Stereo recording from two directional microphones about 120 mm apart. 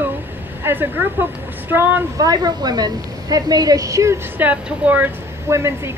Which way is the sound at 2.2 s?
35° right (ahead or behind).